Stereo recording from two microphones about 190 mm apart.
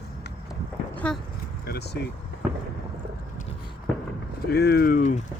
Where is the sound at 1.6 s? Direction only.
60° left (ahead or behind).